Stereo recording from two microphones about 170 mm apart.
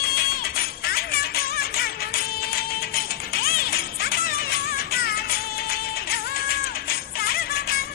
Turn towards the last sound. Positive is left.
turn(degrees=65)  # may be behind; listen again after turning